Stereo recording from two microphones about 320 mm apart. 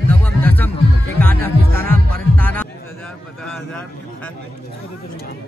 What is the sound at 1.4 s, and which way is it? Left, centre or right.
Music, right.